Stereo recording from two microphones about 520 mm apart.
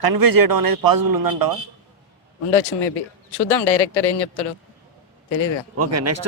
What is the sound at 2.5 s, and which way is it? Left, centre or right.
Speech, left.